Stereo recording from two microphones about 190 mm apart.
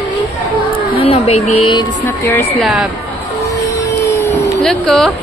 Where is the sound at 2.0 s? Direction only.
10° left (ahead or behind).